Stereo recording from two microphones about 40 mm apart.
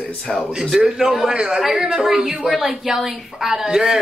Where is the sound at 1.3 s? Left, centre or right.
Right.